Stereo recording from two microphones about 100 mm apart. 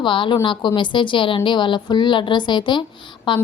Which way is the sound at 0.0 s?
55° left (ahead or behind).